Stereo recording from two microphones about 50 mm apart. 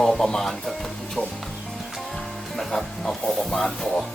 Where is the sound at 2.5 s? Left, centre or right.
Centre.